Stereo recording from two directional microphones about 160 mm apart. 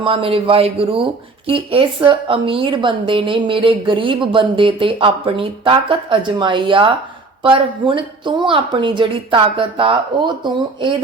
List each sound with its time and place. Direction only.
0.0 s speech: 35° right (ahead or behind)